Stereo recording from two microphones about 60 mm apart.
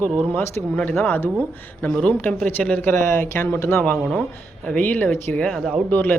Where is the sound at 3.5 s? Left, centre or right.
Left.